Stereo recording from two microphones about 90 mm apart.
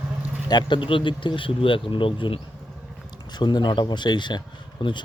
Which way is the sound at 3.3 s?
50° left (ahead or behind).